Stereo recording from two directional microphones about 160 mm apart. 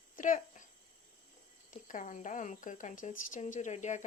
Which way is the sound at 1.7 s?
55° left (ahead or behind).